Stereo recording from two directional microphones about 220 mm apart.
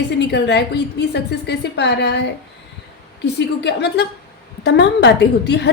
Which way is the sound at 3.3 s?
50° left (ahead or behind).